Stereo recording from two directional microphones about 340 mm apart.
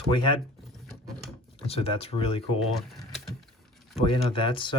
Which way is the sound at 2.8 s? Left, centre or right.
Centre.